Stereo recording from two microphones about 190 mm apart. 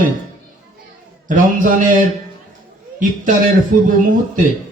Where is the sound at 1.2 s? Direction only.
45° right (ahead or behind).